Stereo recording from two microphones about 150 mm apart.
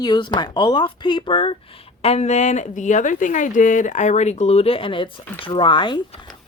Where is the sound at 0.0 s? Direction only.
30° left (ahead or behind).